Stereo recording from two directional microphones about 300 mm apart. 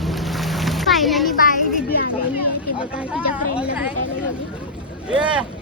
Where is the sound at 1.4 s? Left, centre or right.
Left.